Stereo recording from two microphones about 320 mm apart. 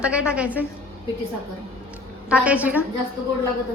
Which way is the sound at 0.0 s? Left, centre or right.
Centre.